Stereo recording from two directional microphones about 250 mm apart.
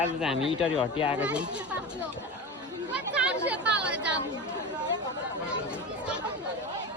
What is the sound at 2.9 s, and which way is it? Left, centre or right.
Chatter, centre.